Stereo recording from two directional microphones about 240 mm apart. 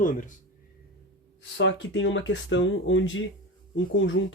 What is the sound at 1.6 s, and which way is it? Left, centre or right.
Speech, left.